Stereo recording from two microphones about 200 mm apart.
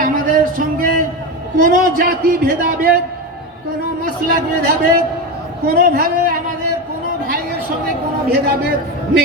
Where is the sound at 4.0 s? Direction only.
50° right (ahead or behind).